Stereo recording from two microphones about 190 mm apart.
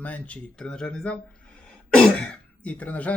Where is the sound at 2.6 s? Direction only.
5° left (ahead or behind).